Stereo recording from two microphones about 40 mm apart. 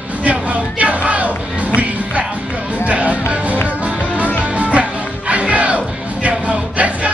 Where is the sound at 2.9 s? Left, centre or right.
Right.